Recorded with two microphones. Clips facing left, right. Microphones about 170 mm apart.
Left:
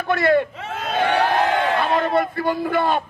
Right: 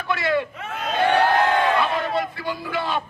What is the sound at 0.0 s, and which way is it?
Speech, 50° left (ahead or behind).